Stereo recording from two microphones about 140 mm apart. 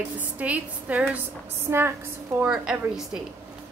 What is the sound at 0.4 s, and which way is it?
A woman's voice, 10° right (ahead or behind).